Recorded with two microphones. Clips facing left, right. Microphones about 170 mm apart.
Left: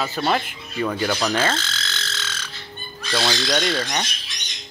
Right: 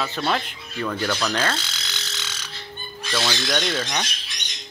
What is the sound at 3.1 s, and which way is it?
Speech, 20° left (ahead or behind).